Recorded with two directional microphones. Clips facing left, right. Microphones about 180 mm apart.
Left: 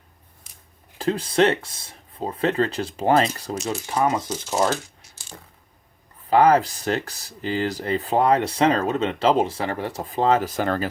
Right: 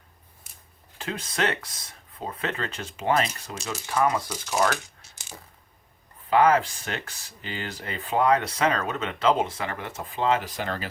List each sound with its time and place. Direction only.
0.9 s speech: 35° left (ahead or behind)
3.8 s speech: 25° left (ahead or behind)
5.0 s a sound: 25° right (ahead or behind)
6.3 s speech: 35° left (ahead or behind)